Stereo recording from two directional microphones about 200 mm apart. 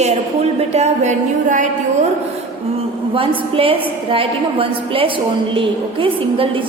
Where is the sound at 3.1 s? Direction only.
25° right (ahead or behind).